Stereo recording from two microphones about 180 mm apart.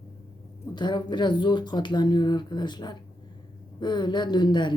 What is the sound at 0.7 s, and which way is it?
Speech, 25° left (ahead or behind).